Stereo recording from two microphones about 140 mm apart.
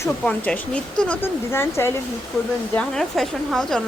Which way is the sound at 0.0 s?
10° left (ahead or behind).